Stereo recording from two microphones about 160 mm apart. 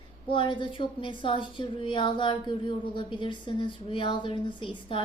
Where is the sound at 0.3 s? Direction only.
30° left (ahead or behind).